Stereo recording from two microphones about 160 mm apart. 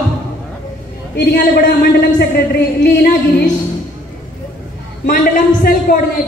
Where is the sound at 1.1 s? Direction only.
90° left.